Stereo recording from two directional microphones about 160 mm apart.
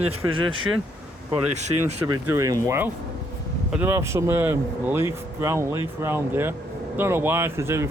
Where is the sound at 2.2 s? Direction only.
20° right (ahead or behind).